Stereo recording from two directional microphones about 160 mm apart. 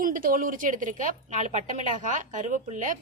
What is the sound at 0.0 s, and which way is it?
A woman's voice, 60° right (ahead or behind).